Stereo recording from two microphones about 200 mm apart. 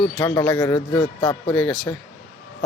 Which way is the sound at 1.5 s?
5° left (ahead or behind).